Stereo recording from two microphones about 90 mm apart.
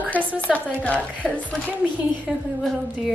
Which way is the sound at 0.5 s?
15° left (ahead or behind).